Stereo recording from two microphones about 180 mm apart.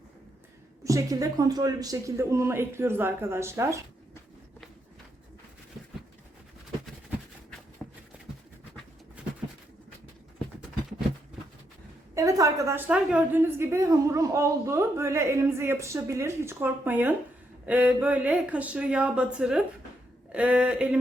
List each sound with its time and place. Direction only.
0.9 s a woman's voice: 20° right (ahead or behind)
7.8 s horse: centre (ahead or behind)
12.1 s a woman's voice: 20° right (ahead or behind)